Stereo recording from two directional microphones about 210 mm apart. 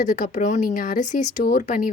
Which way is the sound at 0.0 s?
35° left (ahead or behind).